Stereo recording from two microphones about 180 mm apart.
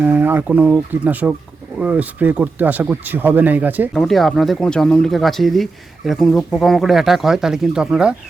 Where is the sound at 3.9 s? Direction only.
Centre (ahead or behind).